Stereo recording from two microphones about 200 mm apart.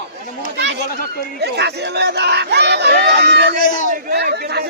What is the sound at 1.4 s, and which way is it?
Crowd, 55° right (ahead or behind).